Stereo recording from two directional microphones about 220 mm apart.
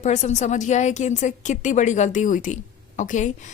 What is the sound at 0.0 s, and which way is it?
A woman's voice, 30° left (ahead or behind).